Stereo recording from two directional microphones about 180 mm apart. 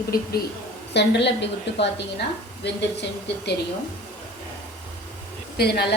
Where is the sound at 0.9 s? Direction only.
70° left (ahead or behind).